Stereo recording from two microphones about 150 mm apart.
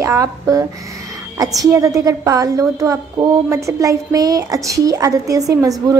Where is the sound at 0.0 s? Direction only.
20° right (ahead or behind).